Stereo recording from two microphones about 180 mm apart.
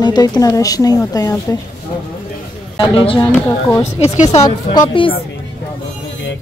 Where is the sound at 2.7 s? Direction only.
30° left (ahead or behind).